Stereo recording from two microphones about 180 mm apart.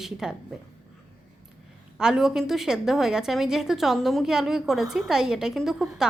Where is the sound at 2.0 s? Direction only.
5° right (ahead or behind).